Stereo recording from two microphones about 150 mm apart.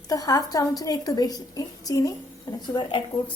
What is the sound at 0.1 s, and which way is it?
A woman's voice, 25° left (ahead or behind).